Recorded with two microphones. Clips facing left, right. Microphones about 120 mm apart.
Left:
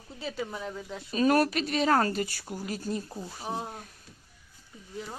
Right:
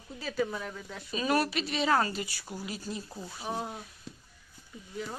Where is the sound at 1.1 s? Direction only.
45° left (ahead or behind).